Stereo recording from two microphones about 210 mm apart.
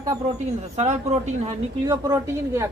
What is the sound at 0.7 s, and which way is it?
Speech, 30° right (ahead or behind).